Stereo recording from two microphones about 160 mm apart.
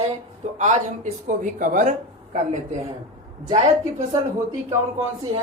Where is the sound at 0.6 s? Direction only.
50° right (ahead or behind).